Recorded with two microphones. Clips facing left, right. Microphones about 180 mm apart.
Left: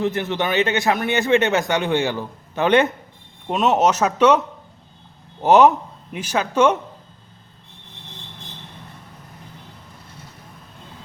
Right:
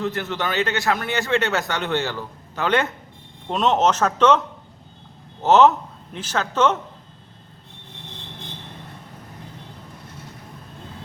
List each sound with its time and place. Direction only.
0.0 s speech: 20° left (ahead or behind)
3.5 s speech: 10° left (ahead or behind)